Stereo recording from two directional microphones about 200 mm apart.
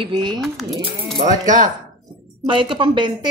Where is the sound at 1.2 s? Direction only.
40° right (ahead or behind).